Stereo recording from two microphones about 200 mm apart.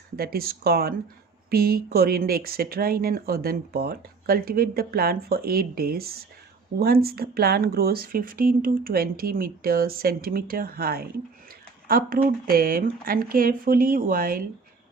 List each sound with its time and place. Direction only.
0.2 s speech: 50° right (ahead or behind)